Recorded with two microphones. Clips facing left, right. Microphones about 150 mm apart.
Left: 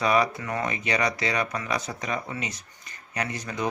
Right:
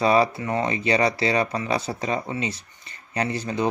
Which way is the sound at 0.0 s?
30° right (ahead or behind).